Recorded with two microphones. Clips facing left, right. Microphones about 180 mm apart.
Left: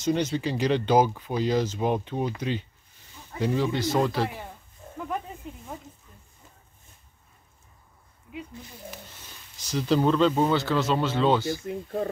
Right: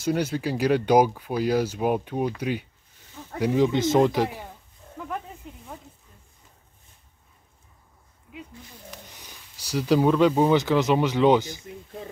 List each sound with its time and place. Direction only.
0.0 s speech: 10° right (ahead or behind)
9.0 s speech: 15° right (ahead or behind)
11.6 s speech: 55° left (ahead or behind)